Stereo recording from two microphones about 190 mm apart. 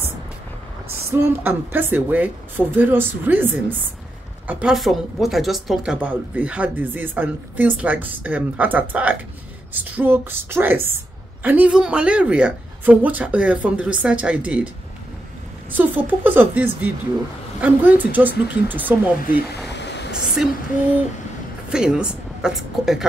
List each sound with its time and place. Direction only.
1.1 s a woman's voice: 10° right (ahead or behind)
15.7 s a woman's voice: 10° right (ahead or behind)
19.7 s a sound: 65° left (ahead or behind)
21.6 s a woman's voice: 5° right (ahead or behind)